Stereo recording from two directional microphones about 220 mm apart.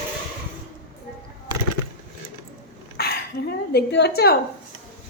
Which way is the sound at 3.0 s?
45° left (ahead or behind).